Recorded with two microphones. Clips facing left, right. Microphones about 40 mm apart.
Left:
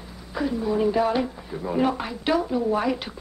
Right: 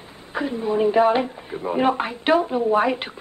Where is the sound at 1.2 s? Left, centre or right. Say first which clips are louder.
Right 3 dB; right.